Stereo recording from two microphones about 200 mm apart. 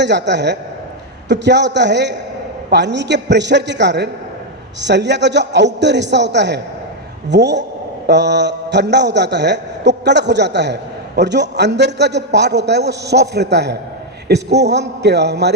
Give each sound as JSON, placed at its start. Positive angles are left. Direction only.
{"t": 0.0, "sound": "a man's voice", "side_deg": -60}